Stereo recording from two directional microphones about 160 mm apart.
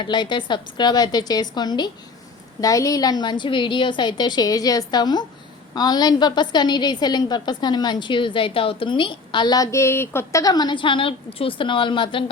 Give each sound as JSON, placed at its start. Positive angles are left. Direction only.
{"t": 0.0, "sound": "a woman's voice", "side_deg": 30}